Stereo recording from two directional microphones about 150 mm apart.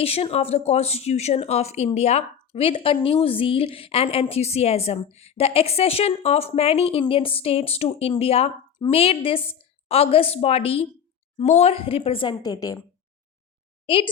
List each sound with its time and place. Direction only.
0.0 s a woman's voice: 40° left (ahead or behind); by 12.8 s 25° left (ahead or behind)
13.8 s a woman's voice: 35° left (ahead or behind)